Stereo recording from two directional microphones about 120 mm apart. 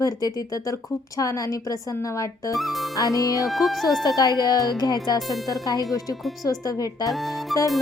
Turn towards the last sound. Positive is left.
turn(degrees=0)  # may be behind; listen again after turning